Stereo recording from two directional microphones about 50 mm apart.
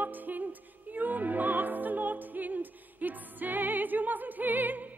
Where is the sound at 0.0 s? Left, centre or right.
Right.